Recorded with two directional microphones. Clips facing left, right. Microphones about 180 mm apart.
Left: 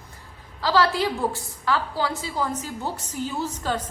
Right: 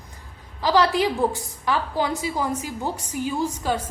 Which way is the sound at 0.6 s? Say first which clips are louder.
Right 2 dB; 15° right (ahead or behind).